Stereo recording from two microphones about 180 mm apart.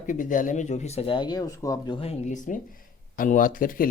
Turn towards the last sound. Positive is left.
turn(degrees=50)  # may be behind; listen again after turning